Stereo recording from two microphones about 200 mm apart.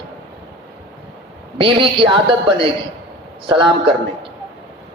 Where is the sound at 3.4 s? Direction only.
25° right (ahead or behind).